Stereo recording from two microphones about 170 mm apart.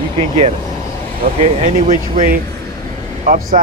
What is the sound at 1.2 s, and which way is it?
Speech, 45° right (ahead or behind).